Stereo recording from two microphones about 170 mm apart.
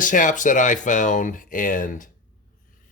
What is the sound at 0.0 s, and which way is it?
Speech, 50° left (ahead or behind).